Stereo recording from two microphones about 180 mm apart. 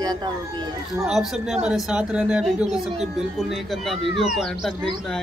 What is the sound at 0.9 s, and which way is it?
Speech, centre (ahead or behind).